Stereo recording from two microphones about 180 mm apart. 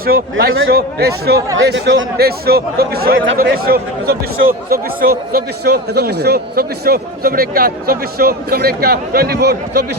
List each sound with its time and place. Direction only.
0.0 s speech: 55° right (ahead or behind)
1.5 s speech: 75° right (ahead or behind)
3.3 s speech: 55° right (ahead or behind)